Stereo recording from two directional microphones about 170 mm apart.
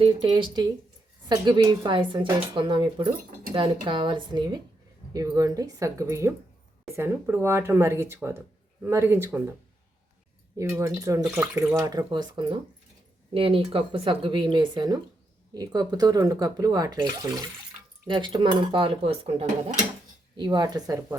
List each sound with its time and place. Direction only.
0.0 s speech: 30° right (ahead or behind); by 9.6 s 15° right (ahead or behind)
10.6 s speech: 15° right (ahead or behind)
11.8 s speech: 20° right (ahead or behind)